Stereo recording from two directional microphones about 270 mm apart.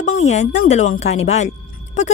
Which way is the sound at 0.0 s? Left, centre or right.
Left.